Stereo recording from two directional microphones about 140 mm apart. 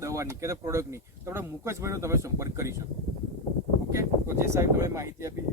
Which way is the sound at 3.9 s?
20° right (ahead or behind).